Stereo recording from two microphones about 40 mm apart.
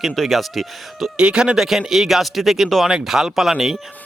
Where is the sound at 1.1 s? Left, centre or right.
Right.